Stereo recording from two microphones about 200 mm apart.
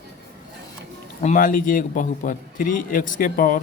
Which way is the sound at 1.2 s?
40° left (ahead or behind).